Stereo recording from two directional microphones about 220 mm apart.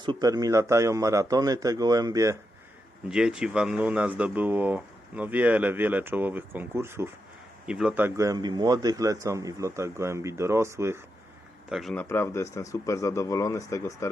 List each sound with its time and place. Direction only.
0.0 s speech: 20° right (ahead or behind)
3.1 s speech: 5° right (ahead or behind)
11.7 s a man's voice: centre (ahead or behind)
12.0 s speech: 10° left (ahead or behind)